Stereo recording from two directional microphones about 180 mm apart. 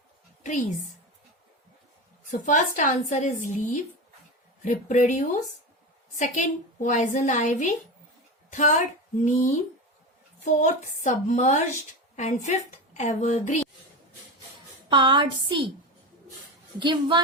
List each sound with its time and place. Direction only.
2.3 s a woman's voice: 45° left (ahead or behind)
10.4 s a woman's voice: 45° left (ahead or behind)
14.8 s a woman's voice: 25° right (ahead or behind)
16.8 s a woman's voice: 25° right (ahead or behind)